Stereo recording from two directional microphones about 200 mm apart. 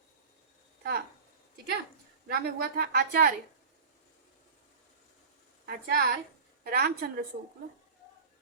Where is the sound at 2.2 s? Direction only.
50° right (ahead or behind).